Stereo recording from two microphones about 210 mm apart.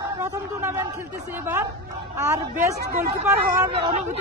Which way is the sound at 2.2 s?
15° right (ahead or behind).